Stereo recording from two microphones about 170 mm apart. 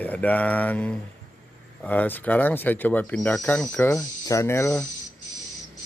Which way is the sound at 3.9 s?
20° left (ahead or behind).